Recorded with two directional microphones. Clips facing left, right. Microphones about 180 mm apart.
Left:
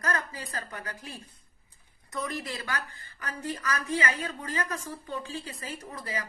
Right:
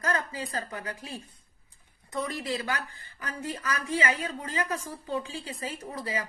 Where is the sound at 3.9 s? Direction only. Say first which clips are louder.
Right 3 dB; 25° right (ahead or behind).